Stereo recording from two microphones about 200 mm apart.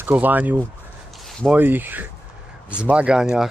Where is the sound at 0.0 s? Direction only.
10° right (ahead or behind).